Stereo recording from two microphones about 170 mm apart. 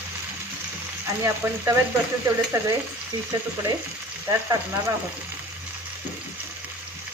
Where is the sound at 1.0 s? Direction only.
15° right (ahead or behind).